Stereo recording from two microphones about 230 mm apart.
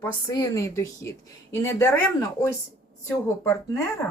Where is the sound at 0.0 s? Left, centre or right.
Centre.